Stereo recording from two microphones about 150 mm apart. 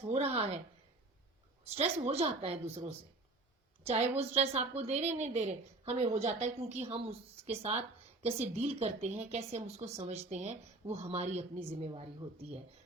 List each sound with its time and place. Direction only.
0.1 s speech: 40° right (ahead or behind)
1.6 s a woman's voice: 45° right (ahead or behind)